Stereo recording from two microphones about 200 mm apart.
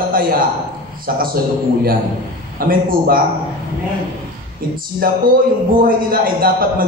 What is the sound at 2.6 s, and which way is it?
Speech, 45° right (ahead or behind).